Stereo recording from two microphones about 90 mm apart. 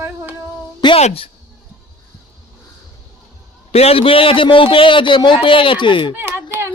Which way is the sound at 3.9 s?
90° left.